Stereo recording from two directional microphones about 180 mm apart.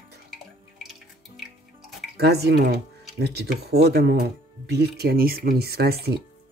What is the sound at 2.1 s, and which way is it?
Speech, 65° right (ahead or behind).